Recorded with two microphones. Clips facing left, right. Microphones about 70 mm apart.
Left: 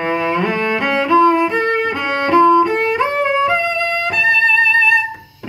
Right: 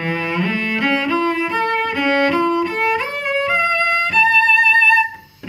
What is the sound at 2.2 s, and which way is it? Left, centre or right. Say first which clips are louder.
Music: left 6 dB; left.